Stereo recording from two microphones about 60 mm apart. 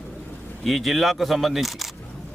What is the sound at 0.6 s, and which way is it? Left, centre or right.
A man's voice, centre.